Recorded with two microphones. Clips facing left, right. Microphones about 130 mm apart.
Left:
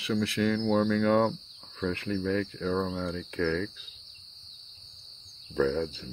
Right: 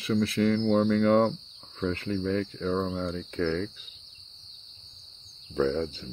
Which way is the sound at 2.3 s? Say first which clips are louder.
Right 1 dB; 30° right (ahead or behind).